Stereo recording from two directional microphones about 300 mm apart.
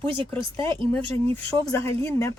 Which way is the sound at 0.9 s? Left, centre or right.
Centre.